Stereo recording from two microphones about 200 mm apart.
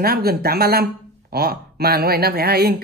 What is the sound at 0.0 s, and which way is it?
Speech, 50° right (ahead or behind).